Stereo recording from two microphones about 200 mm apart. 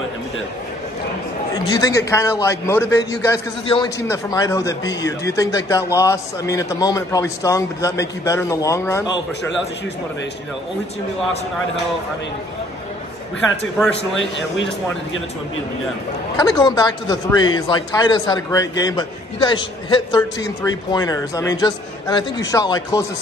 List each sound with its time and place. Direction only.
1.5 s speech: 20° left (ahead or behind)
14.1 s speech: 65° left (ahead or behind)
16.3 s speech: 20° left (ahead or behind)